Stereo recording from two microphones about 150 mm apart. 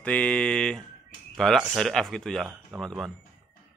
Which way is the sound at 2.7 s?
20° right (ahead or behind).